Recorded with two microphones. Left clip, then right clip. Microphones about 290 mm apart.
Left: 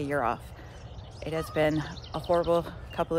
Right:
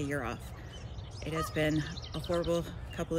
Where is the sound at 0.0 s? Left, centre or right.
Centre.